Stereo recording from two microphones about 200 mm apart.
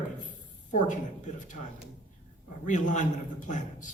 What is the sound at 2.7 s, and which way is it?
Speech, 40° left (ahead or behind).